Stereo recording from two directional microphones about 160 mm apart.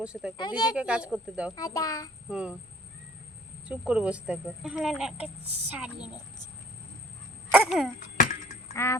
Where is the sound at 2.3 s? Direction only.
5° right (ahead or behind).